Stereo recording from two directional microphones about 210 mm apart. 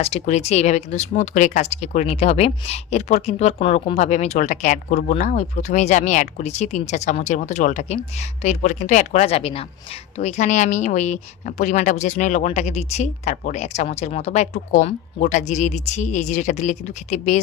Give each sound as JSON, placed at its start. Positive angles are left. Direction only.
{"t": 0.0, "sound": "speech", "side_deg": 30}